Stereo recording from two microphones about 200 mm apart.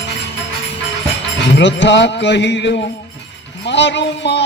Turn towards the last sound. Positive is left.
turn(degrees=60)  # may be behind; listen again after turning